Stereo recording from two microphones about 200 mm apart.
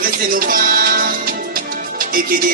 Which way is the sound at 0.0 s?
45° right (ahead or behind).